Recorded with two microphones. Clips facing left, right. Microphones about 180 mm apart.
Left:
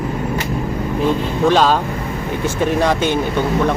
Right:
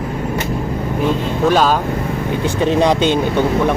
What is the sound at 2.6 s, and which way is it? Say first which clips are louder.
Speech: right 3 dB; 20° right (ahead or behind).